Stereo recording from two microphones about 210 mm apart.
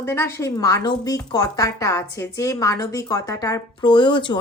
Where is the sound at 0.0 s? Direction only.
10° left (ahead or behind).